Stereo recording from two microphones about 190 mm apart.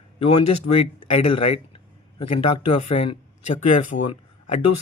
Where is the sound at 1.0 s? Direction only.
30° left (ahead or behind).